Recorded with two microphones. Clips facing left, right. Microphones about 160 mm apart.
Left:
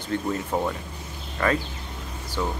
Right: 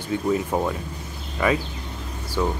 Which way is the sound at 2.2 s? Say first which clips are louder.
Right 4 dB; 10° right (ahead or behind).